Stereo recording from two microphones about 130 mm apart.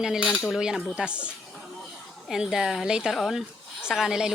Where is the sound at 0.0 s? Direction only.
5° right (ahead or behind).